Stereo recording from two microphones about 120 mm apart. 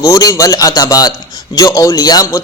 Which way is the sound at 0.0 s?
30° left (ahead or behind).